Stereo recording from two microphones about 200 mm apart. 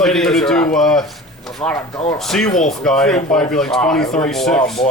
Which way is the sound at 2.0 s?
30° left (ahead or behind).